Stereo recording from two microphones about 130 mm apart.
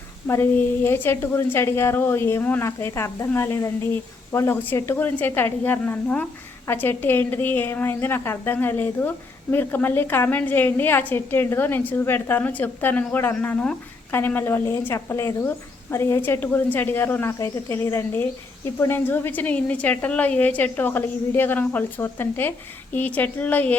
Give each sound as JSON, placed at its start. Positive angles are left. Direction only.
{"t": 0.3, "sound": "a woman's voice", "side_deg": 20}